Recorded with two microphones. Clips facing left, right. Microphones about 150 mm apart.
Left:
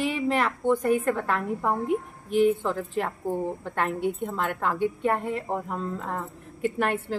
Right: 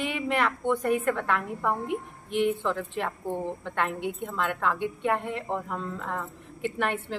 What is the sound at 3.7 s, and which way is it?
A woman's voice, 40° left (ahead or behind).